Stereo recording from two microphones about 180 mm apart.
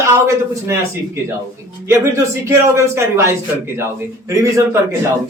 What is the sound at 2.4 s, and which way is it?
A man's voice, 15° right (ahead or behind).